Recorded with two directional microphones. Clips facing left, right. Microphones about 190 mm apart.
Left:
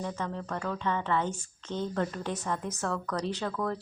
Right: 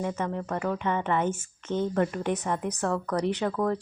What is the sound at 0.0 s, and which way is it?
A woman's voice, 15° right (ahead or behind).